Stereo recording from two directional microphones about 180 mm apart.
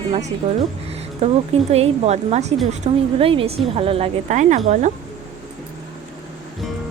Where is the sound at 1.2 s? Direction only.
35° right (ahead or behind).